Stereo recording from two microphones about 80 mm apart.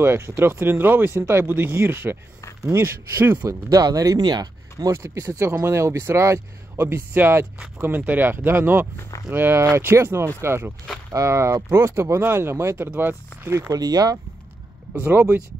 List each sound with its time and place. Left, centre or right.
0.0 s speech: right
3.8 s speech: right
4.2 s speech: right
4.9 s speech: right
13.7 s speech: right
15.0 s speech: right